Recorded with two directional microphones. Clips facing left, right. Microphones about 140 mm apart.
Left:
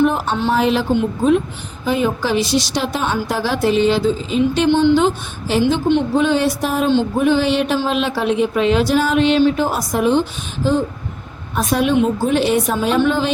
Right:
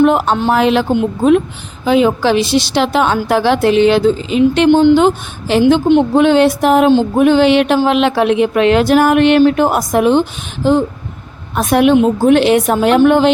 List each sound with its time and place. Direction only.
0.0 s a woman's voice: 70° right (ahead or behind)
1.8 s a woman's voice: 85° right; by 4.7 s 70° right (ahead or behind)
4.7 s speech: 55° right (ahead or behind); by 5.8 s 75° right (ahead or behind)
5.9 s a woman's voice: 60° right (ahead or behind)